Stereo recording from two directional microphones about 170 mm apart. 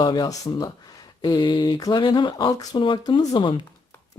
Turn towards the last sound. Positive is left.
turn(degrees=25)  # may be behind; listen again after turning